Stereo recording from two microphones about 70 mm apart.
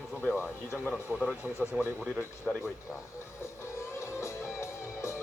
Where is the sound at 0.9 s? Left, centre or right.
Centre.